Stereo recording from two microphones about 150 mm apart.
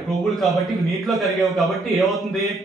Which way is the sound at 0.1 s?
Centre (ahead or behind).